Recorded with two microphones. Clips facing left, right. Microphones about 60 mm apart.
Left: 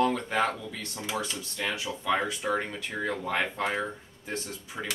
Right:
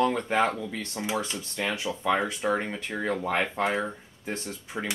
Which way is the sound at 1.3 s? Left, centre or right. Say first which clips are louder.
Right 2 dB; right.